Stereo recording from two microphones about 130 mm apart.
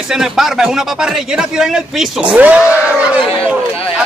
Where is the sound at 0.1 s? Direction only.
5° right (ahead or behind).